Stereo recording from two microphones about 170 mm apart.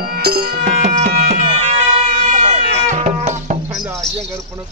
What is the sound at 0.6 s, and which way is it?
Tabla, 40° right (ahead or behind).